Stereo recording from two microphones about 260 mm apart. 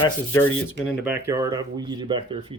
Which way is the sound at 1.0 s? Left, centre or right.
Centre.